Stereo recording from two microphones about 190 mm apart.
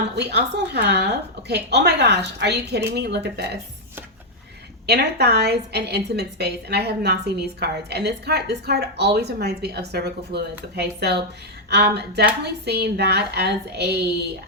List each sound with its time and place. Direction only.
0.0 s a woman's voice: 60° right (ahead or behind)
4.9 s a woman's voice: 60° right (ahead or behind)